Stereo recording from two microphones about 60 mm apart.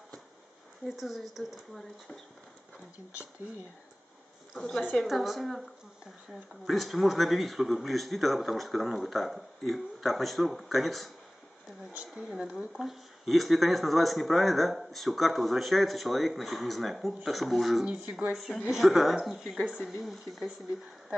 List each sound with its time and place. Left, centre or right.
0.8 s speech: centre
4.6 s a woman's voice: centre
12.3 s speech: centre